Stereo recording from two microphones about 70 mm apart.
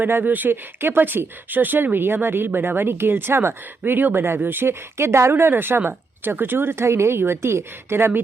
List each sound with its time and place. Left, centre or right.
0.0 s speech: right